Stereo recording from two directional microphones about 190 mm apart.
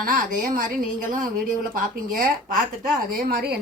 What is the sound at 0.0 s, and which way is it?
A woman's voice, 45° right (ahead or behind).